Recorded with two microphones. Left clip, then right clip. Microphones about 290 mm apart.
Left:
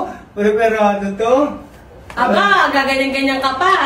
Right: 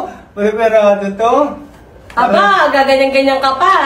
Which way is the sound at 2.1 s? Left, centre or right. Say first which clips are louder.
Right 3 dB; centre.